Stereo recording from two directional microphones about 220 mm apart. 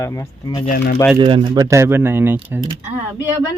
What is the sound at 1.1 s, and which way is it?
Speech, 20° right (ahead or behind).